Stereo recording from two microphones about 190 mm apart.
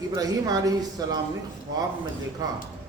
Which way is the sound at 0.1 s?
20° right (ahead or behind).